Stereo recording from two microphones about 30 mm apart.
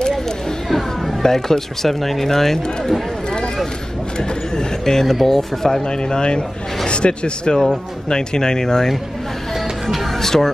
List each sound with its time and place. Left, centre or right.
1.2 s speech: centre
4.2 s a sound: left
5.2 s speech: centre
5.9 s speech: left
10.1 s speech: centre